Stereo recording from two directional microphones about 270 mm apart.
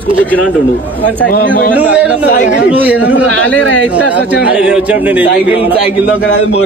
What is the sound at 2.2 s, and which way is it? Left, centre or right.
Speech, left.